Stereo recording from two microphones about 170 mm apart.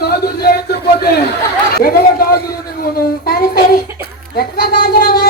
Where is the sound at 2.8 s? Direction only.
60° left (ahead or behind).